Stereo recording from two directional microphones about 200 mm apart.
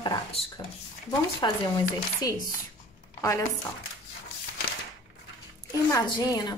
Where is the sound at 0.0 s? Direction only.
25° left (ahead or behind).